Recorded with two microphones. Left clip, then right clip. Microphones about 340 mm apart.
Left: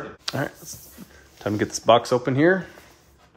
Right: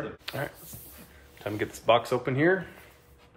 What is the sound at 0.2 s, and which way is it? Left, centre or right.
Speech, left.